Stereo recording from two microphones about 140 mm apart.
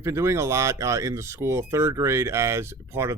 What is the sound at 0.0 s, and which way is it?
Speech, 20° right (ahead or behind).